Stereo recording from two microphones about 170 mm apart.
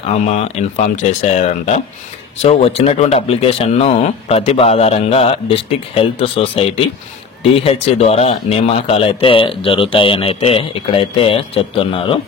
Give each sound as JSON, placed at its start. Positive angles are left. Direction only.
{"t": 0.0, "sound": "speech", "side_deg": 40}